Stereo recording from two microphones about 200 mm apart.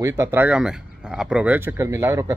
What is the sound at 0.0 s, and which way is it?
Speech, 15° right (ahead or behind).